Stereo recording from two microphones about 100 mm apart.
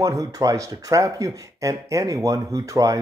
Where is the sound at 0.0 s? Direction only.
35° right (ahead or behind).